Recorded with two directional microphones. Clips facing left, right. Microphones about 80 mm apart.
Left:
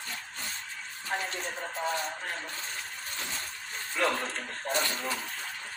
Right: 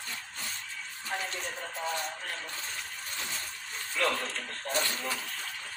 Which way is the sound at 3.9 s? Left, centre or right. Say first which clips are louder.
Left 1 dB; left.